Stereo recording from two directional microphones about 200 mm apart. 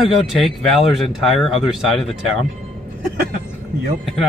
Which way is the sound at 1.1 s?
Centre (ahead or behind).